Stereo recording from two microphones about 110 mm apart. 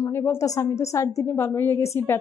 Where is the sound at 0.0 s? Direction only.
20° left (ahead or behind).